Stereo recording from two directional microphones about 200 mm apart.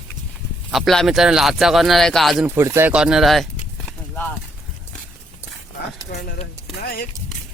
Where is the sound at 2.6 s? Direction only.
10° right (ahead or behind).